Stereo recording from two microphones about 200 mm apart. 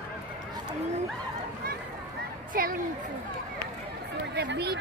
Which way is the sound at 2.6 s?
45° right (ahead or behind).